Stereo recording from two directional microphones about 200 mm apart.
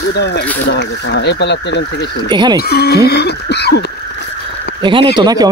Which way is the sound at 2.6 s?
50° left (ahead or behind).